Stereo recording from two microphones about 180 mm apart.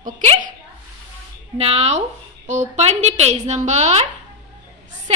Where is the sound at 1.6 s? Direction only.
35° right (ahead or behind).